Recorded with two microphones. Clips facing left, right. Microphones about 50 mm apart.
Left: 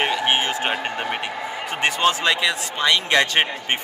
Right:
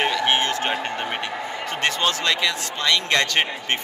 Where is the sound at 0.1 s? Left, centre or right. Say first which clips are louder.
Even; centre.